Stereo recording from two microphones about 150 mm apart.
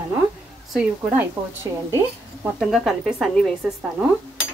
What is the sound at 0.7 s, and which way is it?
Speech, 15° right (ahead or behind).